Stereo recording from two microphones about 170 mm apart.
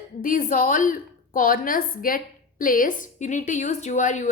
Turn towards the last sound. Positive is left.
turn(degrees=45)  # may be behind; listen again after turning